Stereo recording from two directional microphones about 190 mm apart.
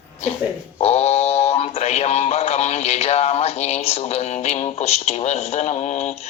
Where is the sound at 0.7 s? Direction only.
35° left (ahead or behind).